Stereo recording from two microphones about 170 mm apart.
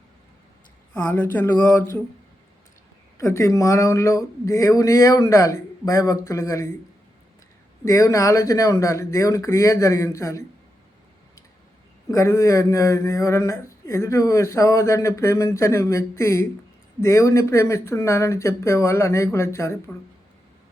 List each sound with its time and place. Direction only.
0.9 s speech: 10° left (ahead or behind)
3.2 s speech: 15° left (ahead or behind)
7.9 s speech: 20° left (ahead or behind)
12.1 s speech: 20° left (ahead or behind)